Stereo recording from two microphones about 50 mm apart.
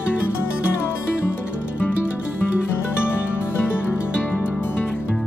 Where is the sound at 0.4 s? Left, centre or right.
Left.